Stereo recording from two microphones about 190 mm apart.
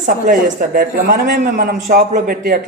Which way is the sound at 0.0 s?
45° right (ahead or behind).